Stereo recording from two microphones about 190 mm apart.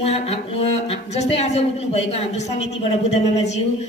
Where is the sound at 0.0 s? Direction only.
30° left (ahead or behind).